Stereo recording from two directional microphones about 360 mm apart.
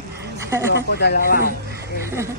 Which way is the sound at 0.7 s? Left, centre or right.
Left.